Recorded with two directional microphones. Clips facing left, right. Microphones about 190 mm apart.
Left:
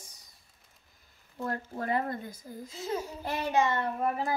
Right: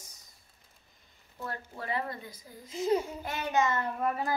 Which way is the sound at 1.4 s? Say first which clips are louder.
Left 5 dB; 45° left (ahead or behind).